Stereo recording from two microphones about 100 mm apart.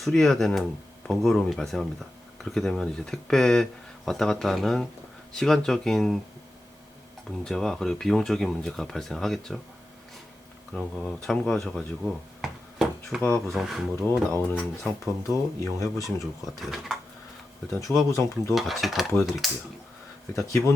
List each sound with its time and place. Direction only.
0.0 s speech: 5° left (ahead or behind)
7.3 s speech: 5° left (ahead or behind)
10.8 s speech: 5° left (ahead or behind)
12.4 s a sound: centre (ahead or behind)
13.2 s speech: 10° left (ahead or behind)
14.1 s speech: 20° left (ahead or behind)
15.3 s speech: 30° left (ahead or behind)
16.6 s speech: centre (ahead or behind)
17.7 s speech: 30° left (ahead or behind)
18.5 s speech: centre (ahead or behind)
20.3 s speech: 30° left (ahead or behind)